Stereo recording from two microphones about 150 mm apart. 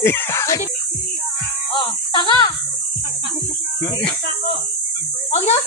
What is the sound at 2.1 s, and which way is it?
Speech, 30° left (ahead or behind).